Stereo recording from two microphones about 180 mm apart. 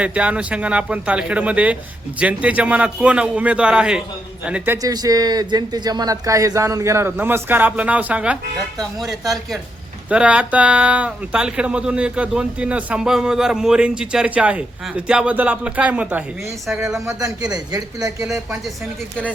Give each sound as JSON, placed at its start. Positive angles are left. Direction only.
{"t": 0.0, "sound": "speech", "side_deg": -5}
{"t": 10.1, "sound": "speech", "side_deg": -5}
{"t": 17.1, "sound": "a man's voice", "side_deg": -20}